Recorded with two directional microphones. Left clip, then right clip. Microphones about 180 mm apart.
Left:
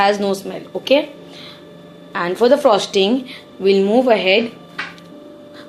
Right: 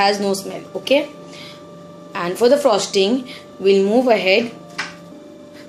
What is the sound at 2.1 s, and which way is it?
A woman's voice, 15° left (ahead or behind).